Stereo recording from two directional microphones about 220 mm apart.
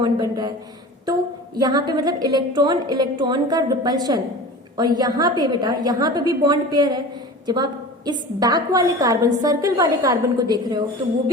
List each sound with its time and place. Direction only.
0.0 s a woman's voice: 20° right (ahead or behind)